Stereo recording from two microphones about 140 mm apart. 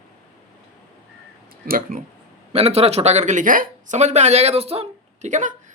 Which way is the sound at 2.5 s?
45° right (ahead or behind).